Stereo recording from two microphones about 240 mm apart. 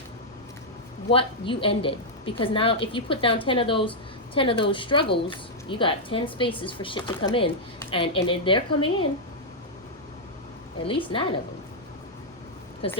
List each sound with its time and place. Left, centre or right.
1.1 s a woman's voice: left
10.8 s a woman's voice: left
12.8 s a woman's voice: left